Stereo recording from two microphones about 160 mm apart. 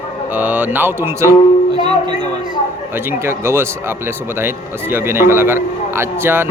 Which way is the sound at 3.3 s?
15° right (ahead or behind).